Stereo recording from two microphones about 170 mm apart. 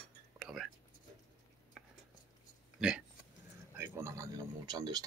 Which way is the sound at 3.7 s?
15° right (ahead or behind).